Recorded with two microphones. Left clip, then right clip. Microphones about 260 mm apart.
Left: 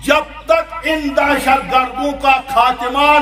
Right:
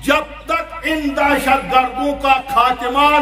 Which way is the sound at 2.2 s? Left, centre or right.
Centre.